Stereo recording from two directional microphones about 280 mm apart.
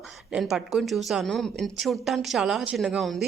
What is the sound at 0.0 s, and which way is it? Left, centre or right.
Speech, centre.